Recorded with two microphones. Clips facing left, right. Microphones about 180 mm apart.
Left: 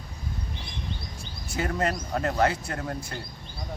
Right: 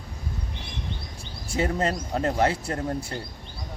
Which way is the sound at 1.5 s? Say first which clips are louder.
Right 2 dB; 25° right (ahead or behind).